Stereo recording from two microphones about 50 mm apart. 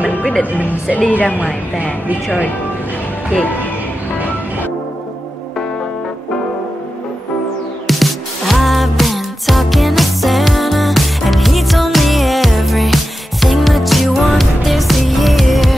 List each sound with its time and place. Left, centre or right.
0.2 s music: left
1.1 s a woman's voice: left
1.4 s speech: right
7.8 s music: centre